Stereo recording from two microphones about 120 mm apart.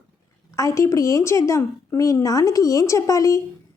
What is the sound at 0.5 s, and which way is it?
A woman's voice, 25° left (ahead or behind).